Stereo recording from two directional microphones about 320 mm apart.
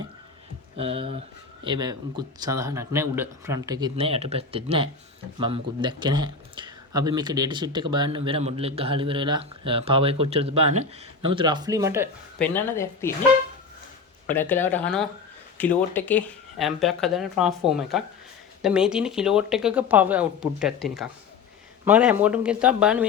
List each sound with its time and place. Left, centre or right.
0.8 s speech: centre
12.4 s speech: centre
14.3 s speech: centre